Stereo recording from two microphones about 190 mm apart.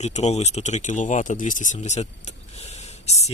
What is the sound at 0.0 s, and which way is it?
Speech, 35° left (ahead or behind).